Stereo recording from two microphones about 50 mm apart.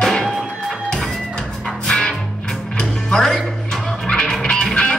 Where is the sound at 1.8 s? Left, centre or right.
Centre.